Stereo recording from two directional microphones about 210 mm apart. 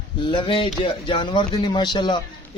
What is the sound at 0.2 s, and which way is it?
Speech, 20° left (ahead or behind).